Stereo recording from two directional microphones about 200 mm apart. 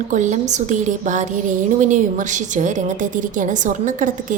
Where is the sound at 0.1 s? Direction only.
40° right (ahead or behind).